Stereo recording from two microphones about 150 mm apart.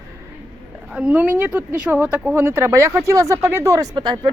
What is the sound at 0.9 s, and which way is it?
Speech, 5° right (ahead or behind).